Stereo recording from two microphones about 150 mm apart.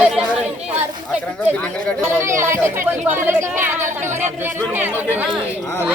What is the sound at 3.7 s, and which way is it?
Speech, 55° right (ahead or behind).